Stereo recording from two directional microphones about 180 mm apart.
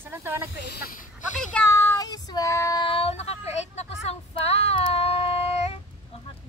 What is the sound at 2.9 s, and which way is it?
Speech, 35° left (ahead or behind).